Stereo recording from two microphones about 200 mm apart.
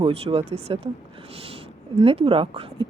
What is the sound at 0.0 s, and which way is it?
Speech, 30° right (ahead or behind).